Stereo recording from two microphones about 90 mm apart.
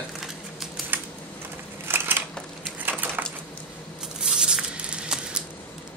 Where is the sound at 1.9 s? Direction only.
25° right (ahead or behind).